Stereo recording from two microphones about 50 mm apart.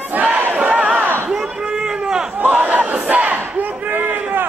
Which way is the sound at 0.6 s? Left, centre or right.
Right.